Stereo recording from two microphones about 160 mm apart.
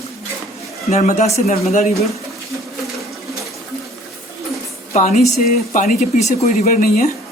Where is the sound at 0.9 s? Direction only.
45° left (ahead or behind).